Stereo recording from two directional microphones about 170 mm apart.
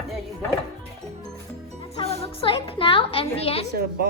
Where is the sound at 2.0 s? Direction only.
30° left (ahead or behind).